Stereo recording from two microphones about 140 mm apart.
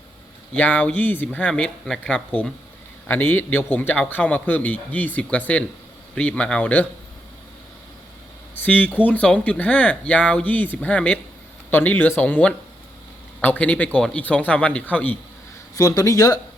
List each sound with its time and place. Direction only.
0.5 s speech: 10° left (ahead or behind)
8.5 s speech: 10° left (ahead or behind)
15.7 s speech: 25° left (ahead or behind)